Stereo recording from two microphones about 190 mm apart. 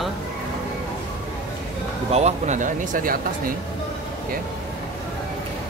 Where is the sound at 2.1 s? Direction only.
35° right (ahead or behind).